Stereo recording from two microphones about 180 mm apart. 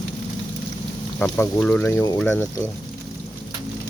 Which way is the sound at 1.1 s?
10° left (ahead or behind).